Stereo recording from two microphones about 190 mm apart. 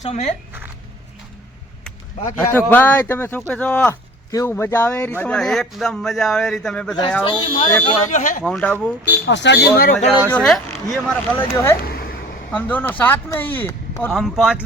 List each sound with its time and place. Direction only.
0.0 s speech: 35° left (ahead or behind)
2.2 s speech: 10° left (ahead or behind)
7.3 s speech: 25° left (ahead or behind)
7.9 s speech: 40° left (ahead or behind)
8.4 s speech: 5° left (ahead or behind)
9.2 s speech: 70° left (ahead or behind)
10.1 s speech: 10° right (ahead or behind)
10.3 s speech: 5° left (ahead or behind)
11.8 s a sound: 55° left (ahead or behind)
12.5 s speech: 10° left (ahead or behind)
14.1 s speech: centre (ahead or behind)